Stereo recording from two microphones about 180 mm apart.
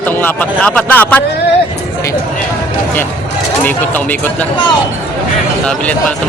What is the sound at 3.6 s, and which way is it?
Speech, 10° left (ahead or behind).